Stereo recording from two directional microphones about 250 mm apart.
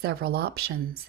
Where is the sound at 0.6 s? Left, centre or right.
Right.